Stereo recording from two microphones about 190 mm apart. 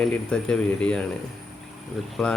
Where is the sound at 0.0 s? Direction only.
5° left (ahead or behind).